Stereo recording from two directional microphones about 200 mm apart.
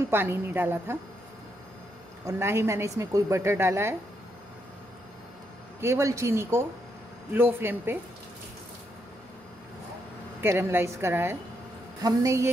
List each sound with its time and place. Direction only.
0.1 s a woman's voice: 10° right (ahead or behind)
2.2 s a woman's voice: 15° right (ahead or behind)
5.8 s a woman's voice: 15° right (ahead or behind)
10.4 s a woman's voice: 10° right (ahead or behind)